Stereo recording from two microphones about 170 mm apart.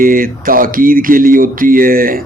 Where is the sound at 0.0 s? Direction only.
55° right (ahead or behind).